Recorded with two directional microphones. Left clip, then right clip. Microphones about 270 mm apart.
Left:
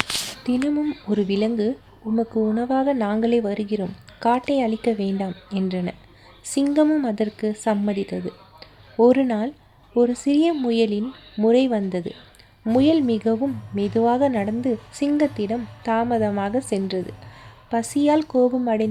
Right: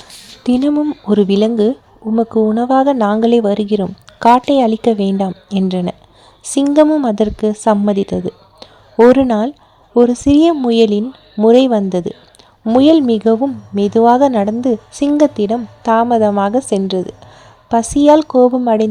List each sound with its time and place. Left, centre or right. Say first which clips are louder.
0.4 s a woman's voice: right 10 dB; right